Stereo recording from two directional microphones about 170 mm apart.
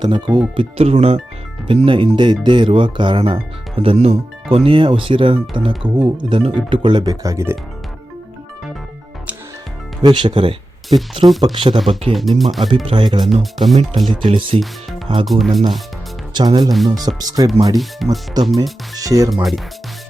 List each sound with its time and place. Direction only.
0.0 s speech: 25° right (ahead or behind)
10.0 s speech: 25° right (ahead or behind)
12.1 s speech: centre (ahead or behind)
12.8 s speech: 30° right (ahead or behind)
13.2 s speech: centre (ahead or behind)
14.3 s speech: 30° right (ahead or behind)
15.3 s speech: centre (ahead or behind)
16.3 s speech: 25° right (ahead or behind)
17.7 s speech: centre (ahead or behind)
18.9 s speech: 20° right (ahead or behind)
19.3 s speech: centre (ahead or behind)